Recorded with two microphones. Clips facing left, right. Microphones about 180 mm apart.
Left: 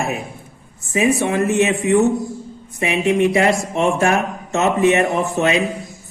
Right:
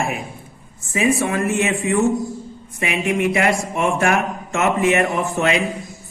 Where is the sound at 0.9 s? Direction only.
25° left (ahead or behind).